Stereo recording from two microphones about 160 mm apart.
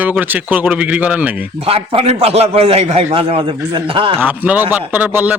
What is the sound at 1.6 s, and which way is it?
A man's voice, 35° right (ahead or behind).